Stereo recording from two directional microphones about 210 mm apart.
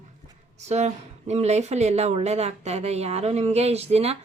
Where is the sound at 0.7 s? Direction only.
30° right (ahead or behind).